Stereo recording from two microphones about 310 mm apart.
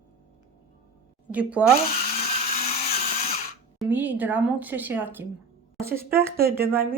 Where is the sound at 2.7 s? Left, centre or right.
Centre.